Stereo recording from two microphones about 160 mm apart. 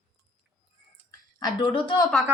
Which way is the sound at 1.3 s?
30° left (ahead or behind).